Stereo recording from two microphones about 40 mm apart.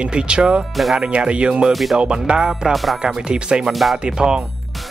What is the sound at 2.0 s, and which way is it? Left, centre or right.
Speech, right.